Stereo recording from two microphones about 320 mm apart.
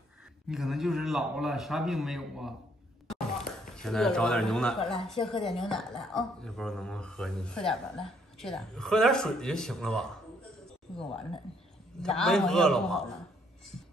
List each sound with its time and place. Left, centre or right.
0.5 s speech: centre
3.7 s speech: centre